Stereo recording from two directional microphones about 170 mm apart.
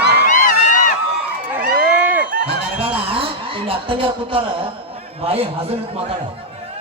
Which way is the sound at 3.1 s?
30° right (ahead or behind).